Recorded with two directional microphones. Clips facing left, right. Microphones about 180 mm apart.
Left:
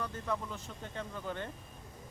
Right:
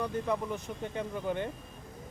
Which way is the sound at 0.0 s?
15° right (ahead or behind).